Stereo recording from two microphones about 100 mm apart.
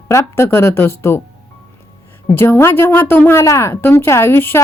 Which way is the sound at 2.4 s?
25° left (ahead or behind).